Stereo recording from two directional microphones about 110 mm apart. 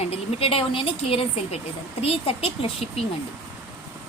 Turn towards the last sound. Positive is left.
turn(degrees=60)  # may be behind; listen again after turning